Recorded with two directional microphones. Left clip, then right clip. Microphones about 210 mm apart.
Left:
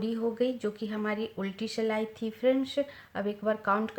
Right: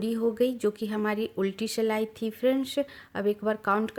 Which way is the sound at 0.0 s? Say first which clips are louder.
Right 3 dB; 45° right (ahead or behind).